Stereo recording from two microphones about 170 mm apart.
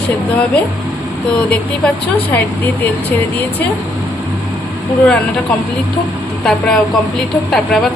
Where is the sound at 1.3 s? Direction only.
5° left (ahead or behind).